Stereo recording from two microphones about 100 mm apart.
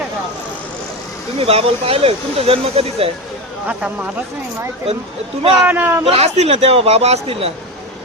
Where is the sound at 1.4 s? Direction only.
80° right.